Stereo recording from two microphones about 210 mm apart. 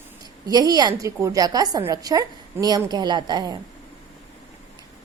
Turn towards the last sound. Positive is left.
turn(degrees=-20)  # may be behind; listen again after turning